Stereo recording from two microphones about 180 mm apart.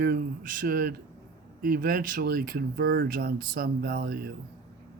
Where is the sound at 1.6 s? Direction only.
50° right (ahead or behind).